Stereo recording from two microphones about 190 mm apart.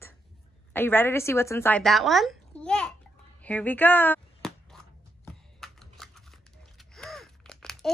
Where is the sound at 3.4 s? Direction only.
10° left (ahead or behind).